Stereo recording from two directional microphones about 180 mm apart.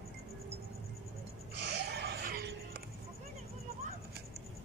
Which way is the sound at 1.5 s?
70° right (ahead or behind).